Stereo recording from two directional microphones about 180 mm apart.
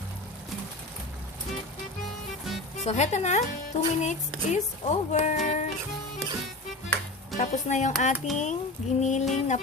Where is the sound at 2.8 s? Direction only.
40° left (ahead or behind).